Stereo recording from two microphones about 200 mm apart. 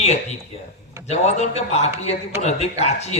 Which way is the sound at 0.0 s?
35° left (ahead or behind).